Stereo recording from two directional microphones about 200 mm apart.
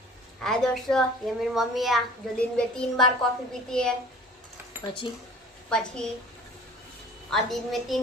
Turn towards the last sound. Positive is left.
turn(degrees=0)  # may be behind; listen again after turning